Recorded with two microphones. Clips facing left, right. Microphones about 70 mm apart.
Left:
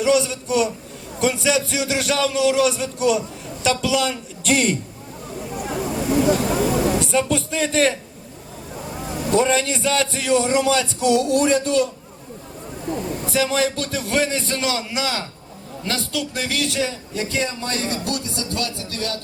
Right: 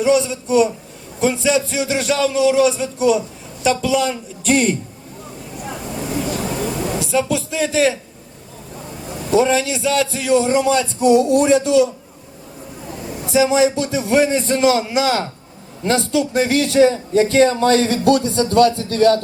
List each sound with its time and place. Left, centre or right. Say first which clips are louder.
0.3 s a man's voice: right 5 dB; centre
3.0 s a woman's voice: right 3 dB; centre
5.6 s a sound: left 3 dB; centre
9.1 s a man's voice: right 3 dB; centre
11.0 s a man's voice: right 6 dB; right
11.3 s a man's voice: right 4 dB; centre
13.2 s a man's voice: right 7 dB; centre; by 17.2 s right
17.2 s a man's voice: right 10 dB; right
17.6 s speech: right 13 dB; right
17.9 s speech: right 11 dB; right